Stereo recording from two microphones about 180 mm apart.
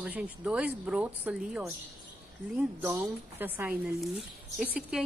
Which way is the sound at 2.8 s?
15° right (ahead or behind).